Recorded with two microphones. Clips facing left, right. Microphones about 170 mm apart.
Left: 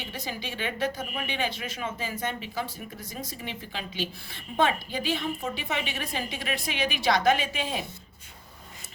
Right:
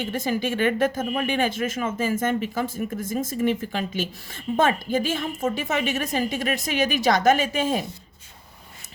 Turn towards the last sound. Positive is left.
turn(degrees=-45)  # may be behind; listen again after turning